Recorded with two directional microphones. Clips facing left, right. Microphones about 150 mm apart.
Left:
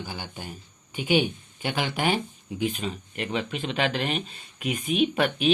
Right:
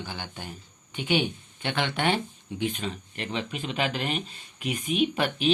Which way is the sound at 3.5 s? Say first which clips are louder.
Left 2 dB; 35° left (ahead or behind).